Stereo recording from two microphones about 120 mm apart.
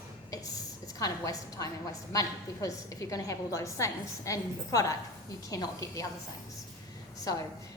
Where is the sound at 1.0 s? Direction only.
30° left (ahead or behind).